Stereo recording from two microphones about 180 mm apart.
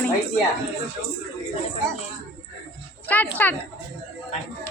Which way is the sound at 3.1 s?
10° left (ahead or behind).